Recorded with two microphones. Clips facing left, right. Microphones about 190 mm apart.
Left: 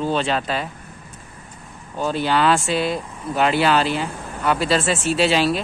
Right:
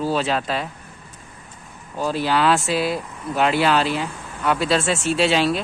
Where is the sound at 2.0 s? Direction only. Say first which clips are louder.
Left 1 dB; centre (ahead or behind).